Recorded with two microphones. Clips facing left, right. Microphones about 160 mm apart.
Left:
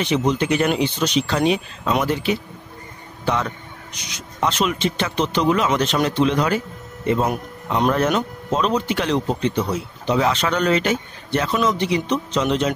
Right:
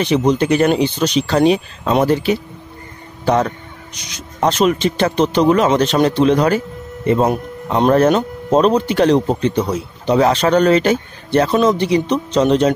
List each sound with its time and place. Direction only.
0.0 s speech: 40° right (ahead or behind)